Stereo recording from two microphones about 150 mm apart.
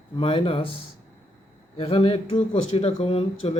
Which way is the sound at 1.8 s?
40° left (ahead or behind).